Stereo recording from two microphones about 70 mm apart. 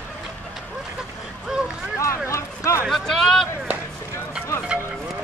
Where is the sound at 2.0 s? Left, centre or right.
Left.